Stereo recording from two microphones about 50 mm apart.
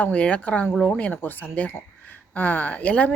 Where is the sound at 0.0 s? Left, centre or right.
Left.